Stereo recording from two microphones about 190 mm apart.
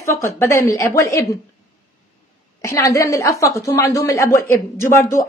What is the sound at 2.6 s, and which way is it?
A woman's voice, 15° left (ahead or behind).